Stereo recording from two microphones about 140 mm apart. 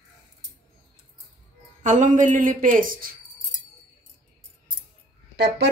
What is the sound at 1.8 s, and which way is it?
A woman's voice, 60° right (ahead or behind).